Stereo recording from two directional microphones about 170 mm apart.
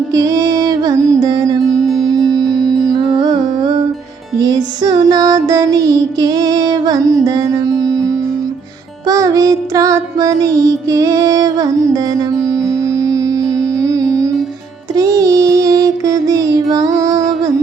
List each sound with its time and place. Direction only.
0.1 s music: 20° right (ahead or behind)
9.0 s music: 20° right (ahead or behind)
14.9 s child singing: 20° right (ahead or behind)